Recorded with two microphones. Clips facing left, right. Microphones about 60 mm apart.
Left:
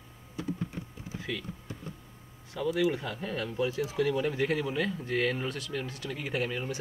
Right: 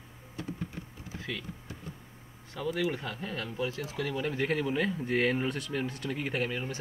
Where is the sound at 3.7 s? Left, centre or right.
Centre.